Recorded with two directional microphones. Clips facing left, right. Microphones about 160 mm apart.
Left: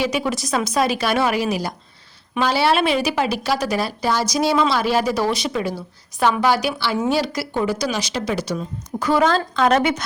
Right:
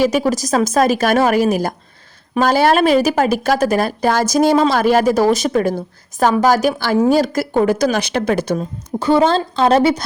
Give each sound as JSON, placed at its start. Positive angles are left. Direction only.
{"t": 0.0, "sound": "speech", "side_deg": -40}
{"t": 9.0, "sound": "a woman's voice", "side_deg": -30}